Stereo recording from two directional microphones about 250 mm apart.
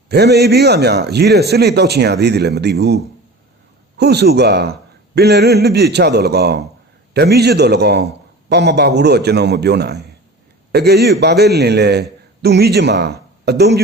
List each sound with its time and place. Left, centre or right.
0.1 s a man's voice: right